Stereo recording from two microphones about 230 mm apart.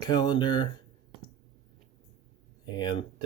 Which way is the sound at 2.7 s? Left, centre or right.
Centre.